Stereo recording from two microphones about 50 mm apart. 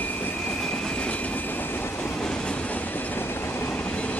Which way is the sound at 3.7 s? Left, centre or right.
Left.